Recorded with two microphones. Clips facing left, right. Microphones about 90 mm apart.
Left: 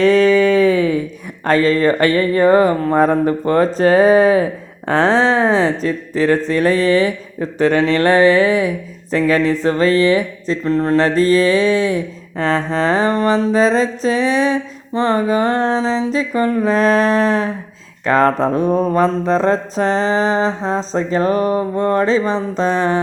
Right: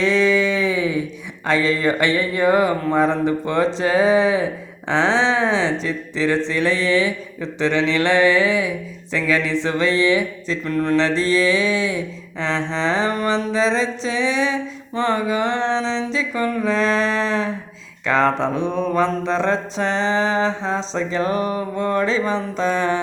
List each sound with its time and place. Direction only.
0.0 s a sound: 50° left (ahead or behind)
1.5 s speech: 45° left (ahead or behind)
4.9 s mantra: 45° left (ahead or behind)
10.9 s mantra: 40° left (ahead or behind)